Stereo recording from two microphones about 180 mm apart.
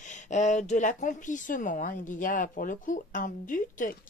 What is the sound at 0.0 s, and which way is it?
Speech, 40° left (ahead or behind).